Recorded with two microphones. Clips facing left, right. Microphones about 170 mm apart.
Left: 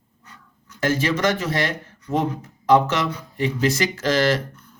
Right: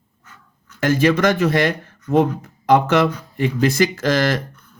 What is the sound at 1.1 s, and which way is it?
Speech, 60° right (ahead or behind).